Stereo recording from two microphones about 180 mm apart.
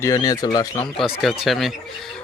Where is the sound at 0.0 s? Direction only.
20° left (ahead or behind).